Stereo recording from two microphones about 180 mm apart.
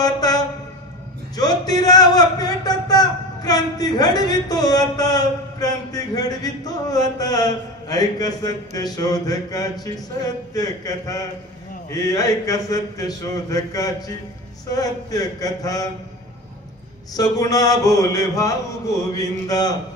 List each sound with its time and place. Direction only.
0.0 s a sound: 20° left (ahead or behind)
1.3 s a man's voice: 20° left (ahead or behind)
17.1 s a man's voice: 20° left (ahead or behind)